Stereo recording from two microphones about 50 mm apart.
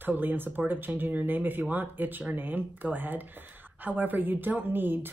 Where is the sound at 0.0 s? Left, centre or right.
Right.